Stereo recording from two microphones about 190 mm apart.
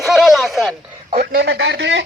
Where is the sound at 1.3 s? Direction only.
60° right (ahead or behind).